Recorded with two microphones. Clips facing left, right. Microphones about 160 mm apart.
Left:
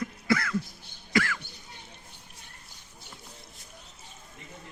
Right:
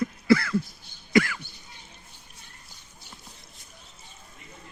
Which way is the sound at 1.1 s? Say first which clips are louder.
Right 5 dB; 15° right (ahead or behind).